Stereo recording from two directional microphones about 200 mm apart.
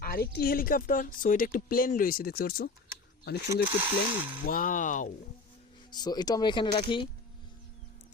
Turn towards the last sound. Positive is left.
turn(degrees=25)  # may be behind; listen again after turning